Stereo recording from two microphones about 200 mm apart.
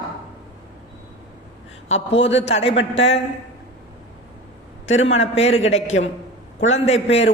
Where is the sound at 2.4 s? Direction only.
30° left (ahead or behind).